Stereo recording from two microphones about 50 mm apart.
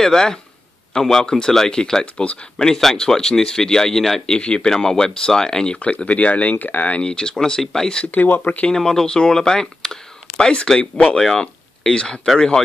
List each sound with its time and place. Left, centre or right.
0.0 s speech: centre
4.4 s speech: centre
5.8 s speech: left
7.0 s speech: centre
8.1 s speech: left
8.6 s speech: centre